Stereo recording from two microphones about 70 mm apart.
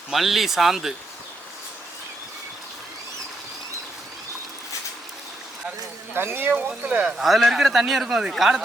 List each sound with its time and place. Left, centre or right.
0.1 s a man's voice: centre
6.1 s speech: right
6.5 s speech: centre
7.2 s a man's voice: centre